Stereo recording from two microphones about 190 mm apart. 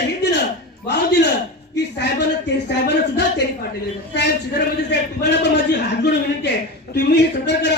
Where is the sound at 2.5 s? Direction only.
65° left (ahead or behind).